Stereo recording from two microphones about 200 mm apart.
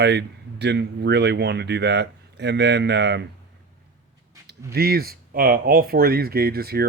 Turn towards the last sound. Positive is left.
turn(degrees=-50)  # may be behind; listen again after turning